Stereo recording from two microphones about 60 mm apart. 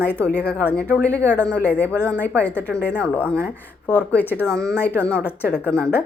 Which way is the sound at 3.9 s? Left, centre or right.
Left.